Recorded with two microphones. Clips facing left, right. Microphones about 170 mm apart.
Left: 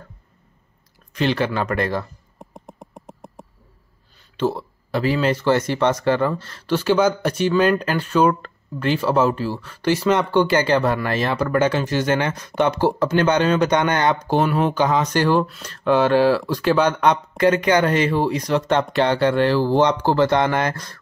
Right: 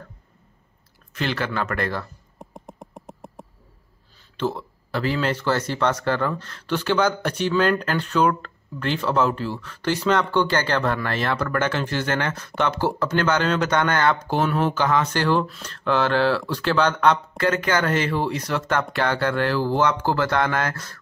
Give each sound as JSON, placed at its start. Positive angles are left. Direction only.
{"t": 1.1, "sound": "speech", "side_deg": 20}
{"t": 2.3, "sound": "a sound", "side_deg": 0}
{"t": 4.4, "sound": "speech", "side_deg": 15}
{"t": 15.4, "sound": "speech", "side_deg": 0}
{"t": 15.7, "sound": "speech", "side_deg": 15}